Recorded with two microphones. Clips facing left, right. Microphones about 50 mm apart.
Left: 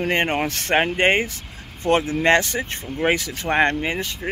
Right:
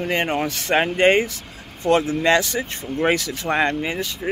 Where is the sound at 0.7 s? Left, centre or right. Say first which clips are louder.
Right 2 dB; left.